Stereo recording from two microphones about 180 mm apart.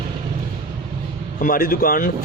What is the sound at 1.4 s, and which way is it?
Speech, 55° left (ahead or behind).